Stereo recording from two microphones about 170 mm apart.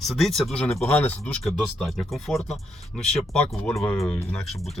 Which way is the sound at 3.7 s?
15° left (ahead or behind).